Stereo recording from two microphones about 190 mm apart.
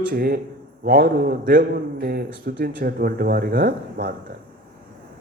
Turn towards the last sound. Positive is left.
turn(degrees=-50)  # may be behind; listen again after turning